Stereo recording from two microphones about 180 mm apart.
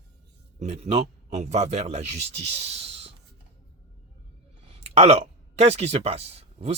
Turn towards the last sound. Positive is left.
turn(degrees=-35)  # may be behind; listen again after turning